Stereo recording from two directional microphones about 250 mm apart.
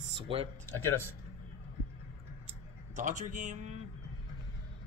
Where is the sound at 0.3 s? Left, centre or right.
Right.